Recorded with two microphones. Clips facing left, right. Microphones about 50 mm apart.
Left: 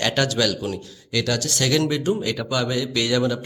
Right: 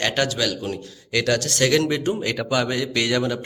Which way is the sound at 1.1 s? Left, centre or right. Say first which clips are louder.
Right 2 dB; right.